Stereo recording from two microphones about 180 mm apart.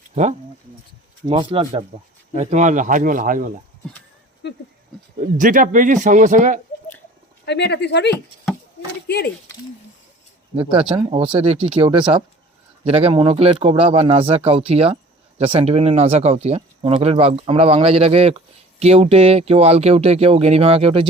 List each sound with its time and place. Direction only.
0.1 s speech: 40° right (ahead or behind)
1.3 s speech: 30° right (ahead or behind); by 3.5 s 50° right (ahead or behind)
4.4 s speech: 75° left (ahead or behind)
5.4 s speech: 45° right (ahead or behind)
7.4 s speech: 70° left (ahead or behind)
10.6 s speech: 30° right (ahead or behind)